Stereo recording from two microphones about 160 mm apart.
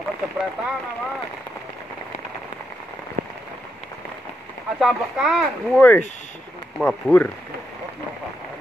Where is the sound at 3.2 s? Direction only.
60° right (ahead or behind).